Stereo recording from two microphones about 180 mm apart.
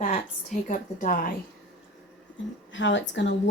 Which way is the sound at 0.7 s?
50° left (ahead or behind).